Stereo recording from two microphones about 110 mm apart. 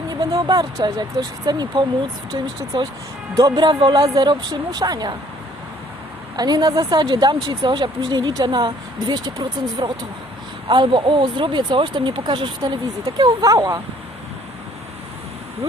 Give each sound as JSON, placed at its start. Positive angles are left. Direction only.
{"t": 0.1, "sound": "speech", "side_deg": -40}
{"t": 3.3, "sound": "speech", "side_deg": -40}
{"t": 6.3, "sound": "speech", "side_deg": -40}